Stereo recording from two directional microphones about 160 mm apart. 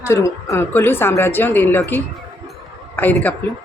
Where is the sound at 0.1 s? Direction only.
20° left (ahead or behind).